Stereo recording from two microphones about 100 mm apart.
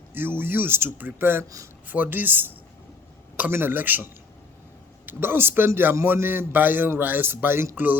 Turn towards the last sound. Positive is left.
turn(degrees=-20)  # may be behind; listen again after turning